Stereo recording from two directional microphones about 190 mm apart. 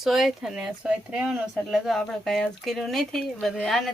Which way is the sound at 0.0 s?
Centre (ahead or behind).